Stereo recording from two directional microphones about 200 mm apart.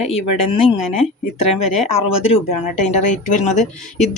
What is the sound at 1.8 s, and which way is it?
Speech, 30° left (ahead or behind).